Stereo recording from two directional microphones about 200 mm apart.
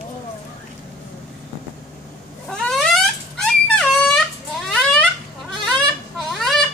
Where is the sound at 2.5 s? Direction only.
Centre (ahead or behind).